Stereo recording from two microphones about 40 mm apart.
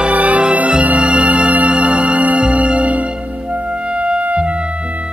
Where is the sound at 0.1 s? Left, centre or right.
Right.